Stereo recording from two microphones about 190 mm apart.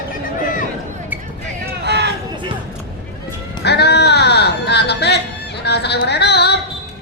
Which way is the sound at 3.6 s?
60° left (ahead or behind).